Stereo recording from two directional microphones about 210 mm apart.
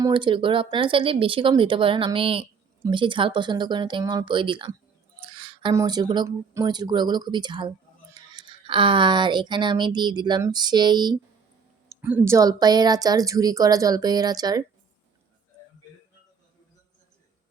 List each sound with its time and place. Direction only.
0.0 s speech: 25° right (ahead or behind)